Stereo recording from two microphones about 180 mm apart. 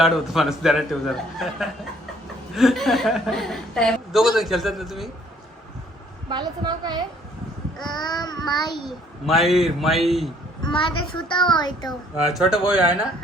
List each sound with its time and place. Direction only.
0.0 s a woman's voice: centre (ahead or behind)
6.2 s a woman's voice: 25° right (ahead or behind)
7.9 s child singing: 25° left (ahead or behind)
8.8 s a woman's voice: centre (ahead or behind)
10.6 s a child's voice: 25° left (ahead or behind)
11.2 s child singing: 25° left (ahead or behind)
12.3 s a woman's voice: 5° right (ahead or behind)